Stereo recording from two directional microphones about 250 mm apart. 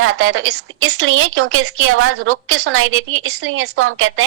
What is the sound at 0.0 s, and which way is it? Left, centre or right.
A woman's voice, right.